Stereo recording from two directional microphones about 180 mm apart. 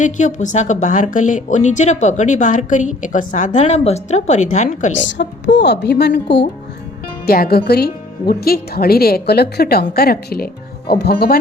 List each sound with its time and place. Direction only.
0.0 s a woman's voice: 40° left (ahead or behind)
4.9 s a woman's voice: 80° left
7.3 s speech: 55° left (ahead or behind)